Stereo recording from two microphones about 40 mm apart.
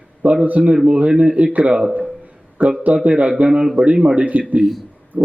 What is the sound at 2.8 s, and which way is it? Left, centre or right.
Speech, right.